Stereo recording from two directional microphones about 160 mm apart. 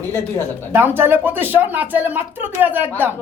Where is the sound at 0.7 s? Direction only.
15° right (ahead or behind).